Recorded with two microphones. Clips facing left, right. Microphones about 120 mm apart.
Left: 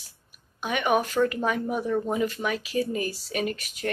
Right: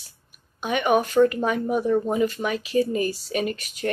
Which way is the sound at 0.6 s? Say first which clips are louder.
Right 3 dB; 5° left (ahead or behind).